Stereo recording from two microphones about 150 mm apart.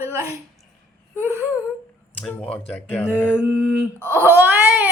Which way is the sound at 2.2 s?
10° left (ahead or behind).